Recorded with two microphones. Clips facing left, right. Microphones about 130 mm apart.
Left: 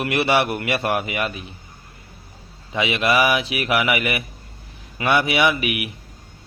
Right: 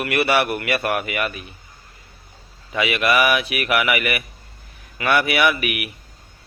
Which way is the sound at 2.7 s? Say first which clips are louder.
Even; 25° left (ahead or behind).